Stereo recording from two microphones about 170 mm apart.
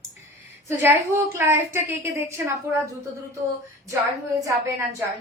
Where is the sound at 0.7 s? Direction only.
15° right (ahead or behind).